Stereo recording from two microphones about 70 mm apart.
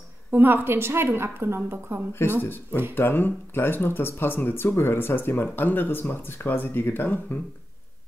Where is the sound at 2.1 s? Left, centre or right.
Left.